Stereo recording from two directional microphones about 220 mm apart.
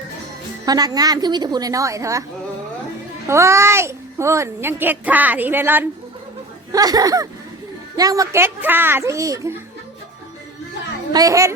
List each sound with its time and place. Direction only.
0.6 s a child's voice: 15° right (ahead or behind)
3.2 s a child's voice: 15° right (ahead or behind)
11.1 s a child's voice: 15° right (ahead or behind)